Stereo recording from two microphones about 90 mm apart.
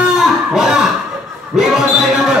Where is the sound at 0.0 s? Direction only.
5° right (ahead or behind).